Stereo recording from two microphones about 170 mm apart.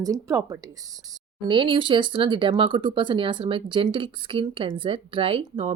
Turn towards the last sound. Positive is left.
turn(degrees=-30)  # may be behind; listen again after turning